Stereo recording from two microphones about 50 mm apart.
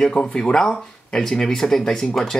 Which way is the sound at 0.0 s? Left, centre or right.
Centre.